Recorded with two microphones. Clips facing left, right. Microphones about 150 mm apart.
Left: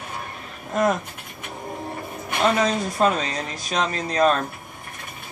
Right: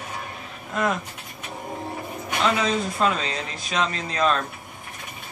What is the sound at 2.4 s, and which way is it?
Speech, 40° left (ahead or behind).